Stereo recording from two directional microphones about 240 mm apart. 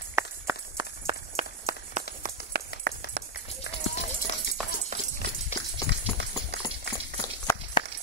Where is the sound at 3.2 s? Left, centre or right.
Right.